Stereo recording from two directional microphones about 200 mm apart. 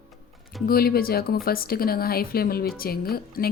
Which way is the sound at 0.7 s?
50° left (ahead or behind).